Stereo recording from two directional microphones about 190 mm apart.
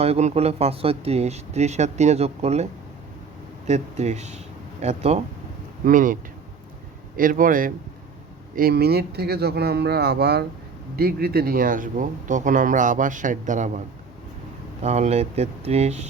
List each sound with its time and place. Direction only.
0.0 s speech: 35° right (ahead or behind)
3.7 s speech: 35° right (ahead or behind)
7.2 s speech: 45° right (ahead or behind)